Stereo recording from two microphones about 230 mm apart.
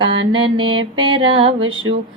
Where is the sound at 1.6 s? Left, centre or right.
Right.